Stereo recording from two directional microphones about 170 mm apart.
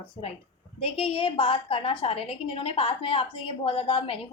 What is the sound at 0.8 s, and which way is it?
A woman's voice, 35° left (ahead or behind).